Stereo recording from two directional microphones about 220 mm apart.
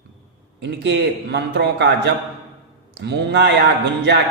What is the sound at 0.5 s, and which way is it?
Speech, 50° right (ahead or behind).